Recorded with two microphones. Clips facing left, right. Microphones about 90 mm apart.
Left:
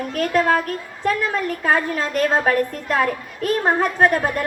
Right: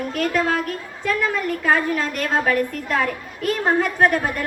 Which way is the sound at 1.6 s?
35° left (ahead or behind).